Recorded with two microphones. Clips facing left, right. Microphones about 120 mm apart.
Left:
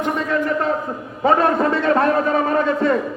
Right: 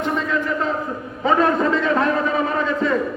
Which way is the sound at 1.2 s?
55° left (ahead or behind).